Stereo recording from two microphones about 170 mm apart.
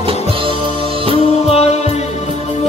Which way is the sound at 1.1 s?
35° left (ahead or behind).